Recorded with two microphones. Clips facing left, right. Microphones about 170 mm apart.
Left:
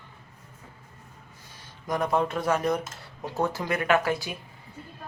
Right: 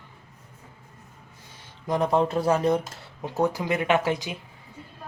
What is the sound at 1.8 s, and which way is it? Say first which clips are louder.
Speech: right 3 dB; 25° right (ahead or behind).